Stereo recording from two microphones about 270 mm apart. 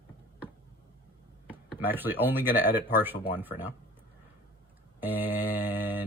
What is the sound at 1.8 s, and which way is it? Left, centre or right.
Speech, centre.